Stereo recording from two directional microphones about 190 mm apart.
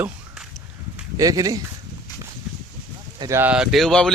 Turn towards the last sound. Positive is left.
turn(degrees=5)  # may be behind; listen again after turning